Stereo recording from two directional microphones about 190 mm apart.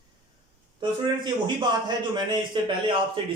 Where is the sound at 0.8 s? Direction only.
25° right (ahead or behind).